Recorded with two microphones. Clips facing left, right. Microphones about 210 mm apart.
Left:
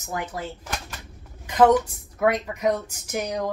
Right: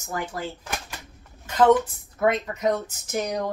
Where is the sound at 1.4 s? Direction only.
10° left (ahead or behind).